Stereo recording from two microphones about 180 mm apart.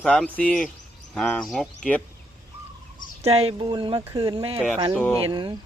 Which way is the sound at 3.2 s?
35° right (ahead or behind).